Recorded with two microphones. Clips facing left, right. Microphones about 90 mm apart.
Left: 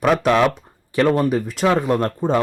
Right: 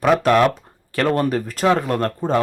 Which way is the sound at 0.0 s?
Centre (ahead or behind).